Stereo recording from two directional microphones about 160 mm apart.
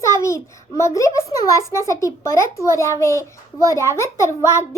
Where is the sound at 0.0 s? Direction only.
15° left (ahead or behind).